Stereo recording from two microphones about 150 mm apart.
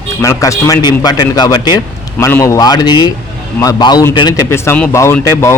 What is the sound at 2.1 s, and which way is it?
A man's voice, 15° left (ahead or behind).